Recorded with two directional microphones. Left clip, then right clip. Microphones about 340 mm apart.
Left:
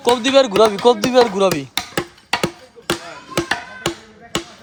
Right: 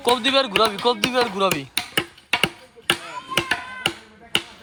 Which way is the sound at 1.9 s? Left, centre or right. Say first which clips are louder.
Even; left.